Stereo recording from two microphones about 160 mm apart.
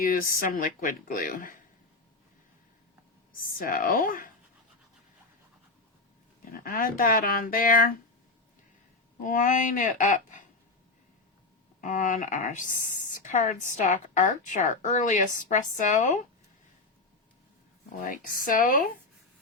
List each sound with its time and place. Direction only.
0.0 s speech: 60° left (ahead or behind)
3.3 s speech: 60° left (ahead or behind)
6.4 s speech: 60° left (ahead or behind)
9.2 s speech: 55° left (ahead or behind)
11.8 s speech: 55° left (ahead or behind)
17.9 s speech: 55° left (ahead or behind)